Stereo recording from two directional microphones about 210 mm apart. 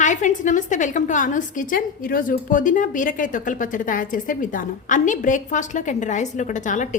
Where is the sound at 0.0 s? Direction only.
35° left (ahead or behind).